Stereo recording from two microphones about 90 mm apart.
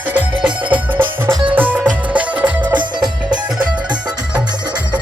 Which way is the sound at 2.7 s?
55° right (ahead or behind).